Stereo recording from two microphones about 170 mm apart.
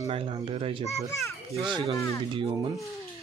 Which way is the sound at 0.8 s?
20° left (ahead or behind).